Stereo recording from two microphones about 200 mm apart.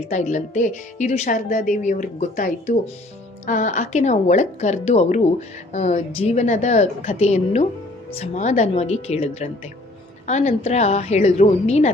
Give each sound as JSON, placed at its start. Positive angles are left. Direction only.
{"t": 0.1, "sound": "a woman's voice", "side_deg": 35}